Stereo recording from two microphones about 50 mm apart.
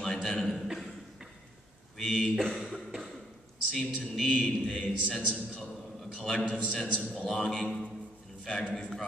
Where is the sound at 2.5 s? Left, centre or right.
Centre.